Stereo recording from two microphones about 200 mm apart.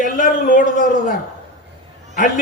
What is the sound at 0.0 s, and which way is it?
A man's voice, 40° left (ahead or behind).